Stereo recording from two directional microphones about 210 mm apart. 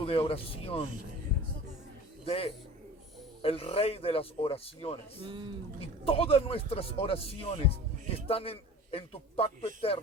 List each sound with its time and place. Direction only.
0.0 s a man's voice: 25° left (ahead or behind)
2.2 s a man's voice: 25° left (ahead or behind)
5.2 s speech: 25° right (ahead or behind)
6.1 s a man's voice: 30° left (ahead or behind)